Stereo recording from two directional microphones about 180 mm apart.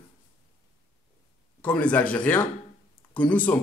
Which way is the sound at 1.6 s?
10° left (ahead or behind).